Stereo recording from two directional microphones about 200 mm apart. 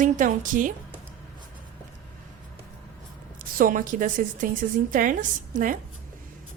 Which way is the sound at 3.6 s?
40° right (ahead or behind).